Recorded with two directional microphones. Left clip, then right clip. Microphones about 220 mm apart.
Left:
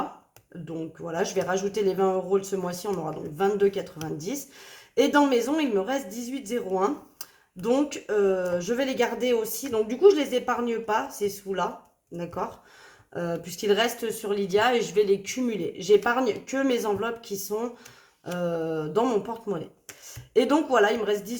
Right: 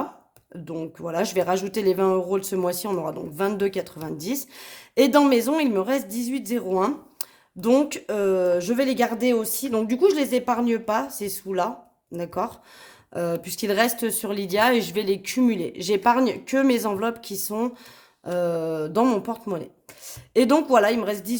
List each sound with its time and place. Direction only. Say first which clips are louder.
0.7 s speech: right 4 dB; 50° right (ahead or behind)